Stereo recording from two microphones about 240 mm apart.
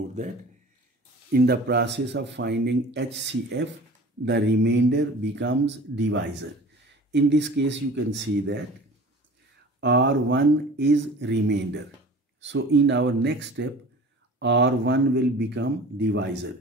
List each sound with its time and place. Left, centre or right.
1.3 s a man's voice: right
9.8 s a man's voice: right